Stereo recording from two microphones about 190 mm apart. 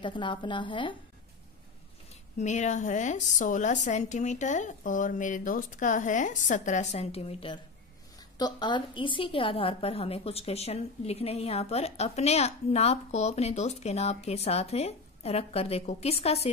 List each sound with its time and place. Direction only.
0.0 s a woman's voice: 25° left (ahead or behind)
2.3 s a woman's voice: 40° left (ahead or behind)